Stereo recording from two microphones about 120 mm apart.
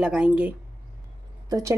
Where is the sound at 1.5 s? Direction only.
25° right (ahead or behind).